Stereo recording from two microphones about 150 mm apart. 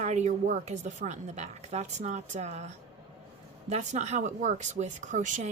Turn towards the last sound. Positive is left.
turn(degrees=-55)  # may be behind; listen again after turning